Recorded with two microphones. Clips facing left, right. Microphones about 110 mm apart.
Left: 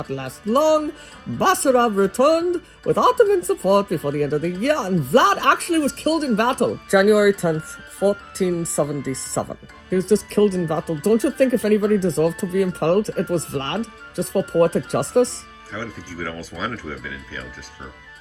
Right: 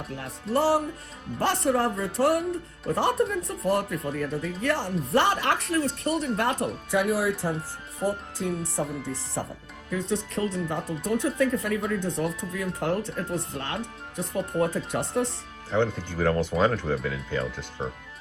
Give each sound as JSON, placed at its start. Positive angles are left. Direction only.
{"t": 0.0, "sound": "speech", "side_deg": 85}
{"t": 16.6, "sound": "speech", "side_deg": -30}